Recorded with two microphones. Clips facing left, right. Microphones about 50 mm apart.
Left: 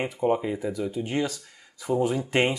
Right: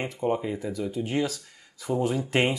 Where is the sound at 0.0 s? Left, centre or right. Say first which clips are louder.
Left 3 dB; centre.